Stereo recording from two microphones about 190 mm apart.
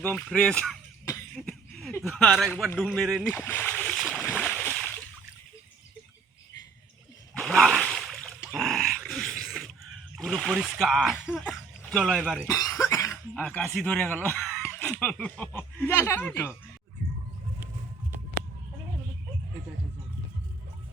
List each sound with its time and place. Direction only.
0.0 s speech: 5° left (ahead or behind)
3.3 s splash: 10° left (ahead or behind)
7.3 s a sound: centre (ahead or behind)
8.5 s dog: centre (ahead or behind)
10.2 s speech: centre (ahead or behind)
12.5 s cough: 15° left (ahead or behind)
13.3 s speech: 5° left (ahead or behind)